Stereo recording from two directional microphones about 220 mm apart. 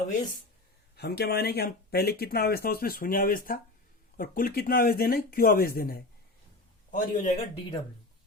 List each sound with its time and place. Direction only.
0.9 s a man's voice: 45° left (ahead or behind)